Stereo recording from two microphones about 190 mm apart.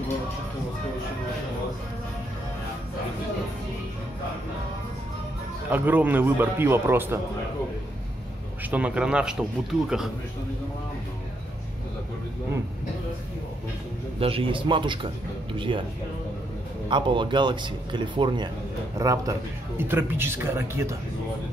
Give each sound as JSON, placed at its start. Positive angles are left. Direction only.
{"t": 5.7, "sound": "a man's voice", "side_deg": -10}
{"t": 8.6, "sound": "speech", "side_deg": -5}
{"t": 14.2, "sound": "speech", "side_deg": -30}
{"t": 16.9, "sound": "a man's voice", "side_deg": -25}